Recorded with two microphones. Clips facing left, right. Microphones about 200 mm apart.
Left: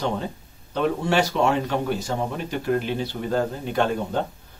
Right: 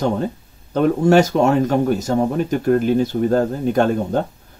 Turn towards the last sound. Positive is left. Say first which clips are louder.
# right 6 dB
turn(degrees=-45)  # may be behind; listen again after turning